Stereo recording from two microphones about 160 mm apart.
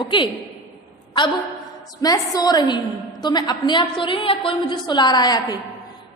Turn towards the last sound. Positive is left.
turn(degrees=25)  # may be behind; listen again after turning